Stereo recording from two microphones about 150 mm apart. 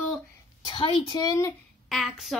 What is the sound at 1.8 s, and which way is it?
Speech, centre (ahead or behind).